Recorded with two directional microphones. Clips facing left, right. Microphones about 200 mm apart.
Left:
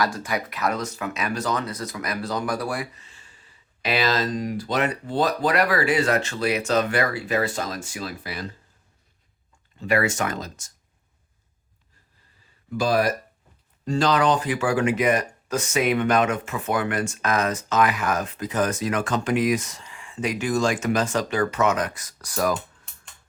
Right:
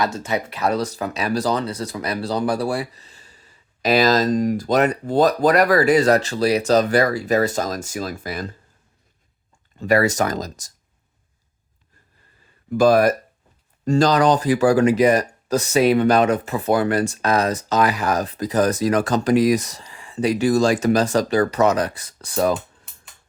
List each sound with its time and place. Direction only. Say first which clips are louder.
0.0 s speech: right 3 dB; 25° right (ahead or behind); by 8.4 s 45° right (ahead or behind)
9.7 s speech: right 5 dB; 40° right (ahead or behind)
12.7 s speech: right 7 dB; 50° right (ahead or behind); by 22.5 s 30° right (ahead or behind)